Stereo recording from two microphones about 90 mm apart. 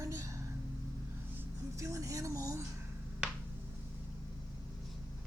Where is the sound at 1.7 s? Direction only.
35° right (ahead or behind).